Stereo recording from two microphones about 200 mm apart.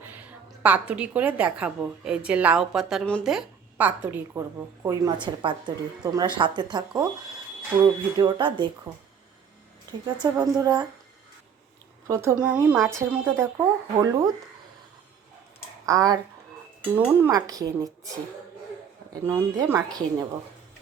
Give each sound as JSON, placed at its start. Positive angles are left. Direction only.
{"t": 0.0, "sound": "a woman's voice", "side_deg": -10}
{"t": 10.2, "sound": "a woman's voice", "side_deg": -15}
{"t": 12.0, "sound": "a woman's voice", "side_deg": -15}
{"t": 15.9, "sound": "a woman's voice", "side_deg": -15}
{"t": 19.3, "sound": "a woman's voice", "side_deg": -15}